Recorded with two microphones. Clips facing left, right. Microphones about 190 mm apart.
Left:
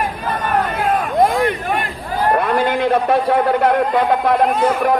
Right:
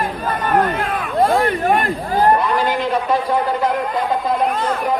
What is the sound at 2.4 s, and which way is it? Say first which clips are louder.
A man's voice: left 2 dB; 55° left (ahead or behind).